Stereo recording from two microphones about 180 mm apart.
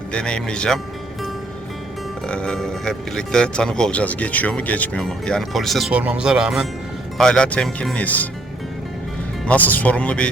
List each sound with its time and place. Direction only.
0.1 s speech: 5° left (ahead or behind)
2.2 s speech: 5° left (ahead or behind)
9.5 s speech: 10° left (ahead or behind)